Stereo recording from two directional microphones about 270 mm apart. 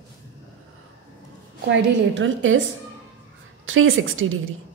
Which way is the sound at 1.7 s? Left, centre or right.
Right.